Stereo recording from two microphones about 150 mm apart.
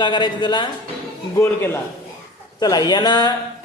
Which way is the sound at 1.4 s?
15° left (ahead or behind).